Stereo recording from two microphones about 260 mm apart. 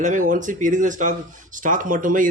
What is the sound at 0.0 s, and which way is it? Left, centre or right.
Speech, right.